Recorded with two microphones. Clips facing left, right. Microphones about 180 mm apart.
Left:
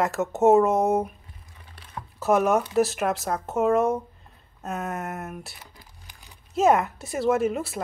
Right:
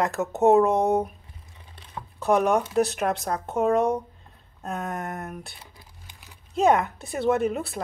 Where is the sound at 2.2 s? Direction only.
Centre (ahead or behind).